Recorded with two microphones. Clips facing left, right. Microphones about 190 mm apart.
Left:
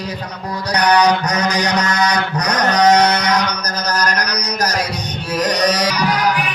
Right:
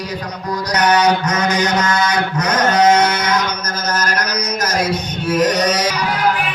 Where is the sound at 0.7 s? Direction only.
35° left (ahead or behind).